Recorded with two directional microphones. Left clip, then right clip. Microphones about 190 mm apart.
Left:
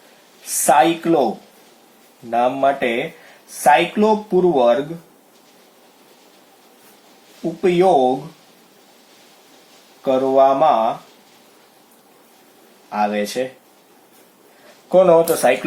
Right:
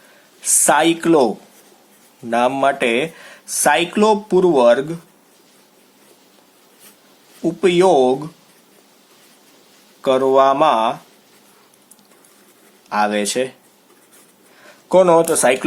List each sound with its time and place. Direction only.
0.5 s speech: 40° right (ahead or behind)
2.3 s speech: 40° right (ahead or behind)
7.6 s speech: 45° right (ahead or behind)
10.0 s speech: 40° right (ahead or behind)
12.9 s speech: 40° right (ahead or behind)
14.8 s speech: 35° right (ahead or behind)